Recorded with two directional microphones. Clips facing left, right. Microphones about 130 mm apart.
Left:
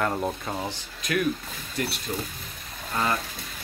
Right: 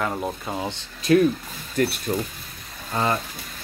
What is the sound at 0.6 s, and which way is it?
Speech, 25° right (ahead or behind).